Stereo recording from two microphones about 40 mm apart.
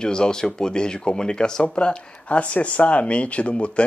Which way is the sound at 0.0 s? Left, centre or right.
Centre.